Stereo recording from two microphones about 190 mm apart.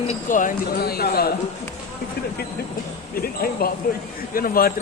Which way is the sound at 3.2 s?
50° left (ahead or behind).